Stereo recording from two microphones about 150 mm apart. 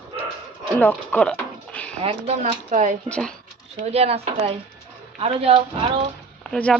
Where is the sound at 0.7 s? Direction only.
10° left (ahead or behind).